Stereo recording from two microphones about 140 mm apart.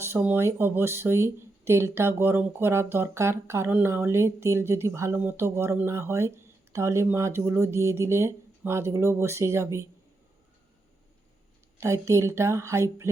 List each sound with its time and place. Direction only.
0.0 s speech: 15° right (ahead or behind)
11.8 s speech: 20° right (ahead or behind)